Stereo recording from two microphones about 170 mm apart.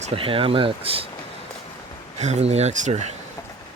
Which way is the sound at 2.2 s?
40° right (ahead or behind).